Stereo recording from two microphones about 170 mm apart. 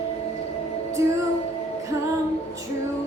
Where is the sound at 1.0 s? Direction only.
15° right (ahead or behind).